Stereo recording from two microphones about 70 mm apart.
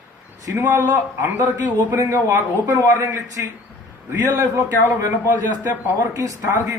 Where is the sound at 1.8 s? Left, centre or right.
Right.